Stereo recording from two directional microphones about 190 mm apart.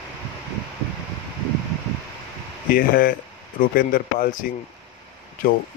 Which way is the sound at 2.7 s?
50° left (ahead or behind).